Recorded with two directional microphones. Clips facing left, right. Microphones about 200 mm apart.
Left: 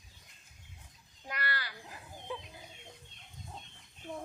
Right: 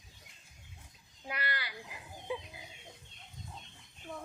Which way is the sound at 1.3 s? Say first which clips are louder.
Even; 15° right (ahead or behind).